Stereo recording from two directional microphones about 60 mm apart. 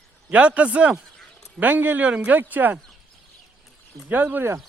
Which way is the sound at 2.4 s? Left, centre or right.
Right.